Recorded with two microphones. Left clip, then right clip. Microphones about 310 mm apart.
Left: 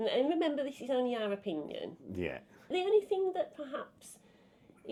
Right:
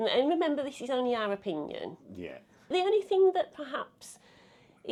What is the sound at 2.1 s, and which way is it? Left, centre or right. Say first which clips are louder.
Speech: left 4 dB; left.